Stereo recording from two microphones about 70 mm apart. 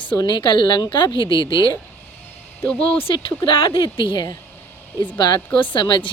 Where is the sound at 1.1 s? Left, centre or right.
Right.